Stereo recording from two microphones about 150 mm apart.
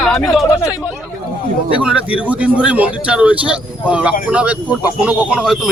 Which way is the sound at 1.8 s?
10° right (ahead or behind).